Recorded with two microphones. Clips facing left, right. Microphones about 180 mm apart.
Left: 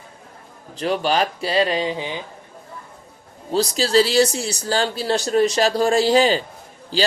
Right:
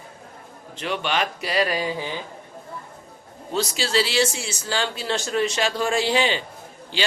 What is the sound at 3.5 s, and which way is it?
Speech, 35° left (ahead or behind).